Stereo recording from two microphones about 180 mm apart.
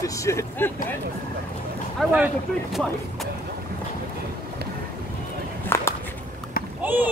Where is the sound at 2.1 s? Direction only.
10° right (ahead or behind).